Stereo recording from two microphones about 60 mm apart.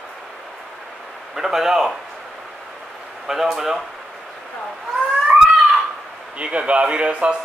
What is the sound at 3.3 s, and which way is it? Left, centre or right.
Speech, centre.